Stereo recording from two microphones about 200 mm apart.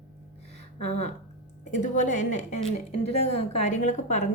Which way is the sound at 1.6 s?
35° left (ahead or behind).